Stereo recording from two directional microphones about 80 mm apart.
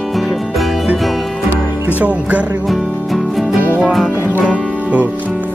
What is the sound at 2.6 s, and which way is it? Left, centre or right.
Music, centre.